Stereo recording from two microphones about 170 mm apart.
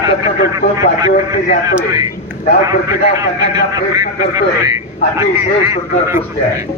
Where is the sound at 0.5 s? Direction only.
20° right (ahead or behind).